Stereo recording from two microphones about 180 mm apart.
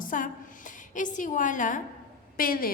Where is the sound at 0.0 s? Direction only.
50° left (ahead or behind).